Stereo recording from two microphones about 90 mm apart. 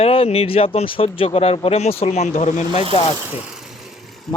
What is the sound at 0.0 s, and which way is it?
Speech, 90° left.